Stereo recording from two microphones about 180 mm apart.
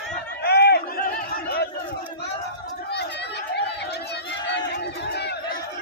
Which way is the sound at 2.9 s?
70° left (ahead or behind).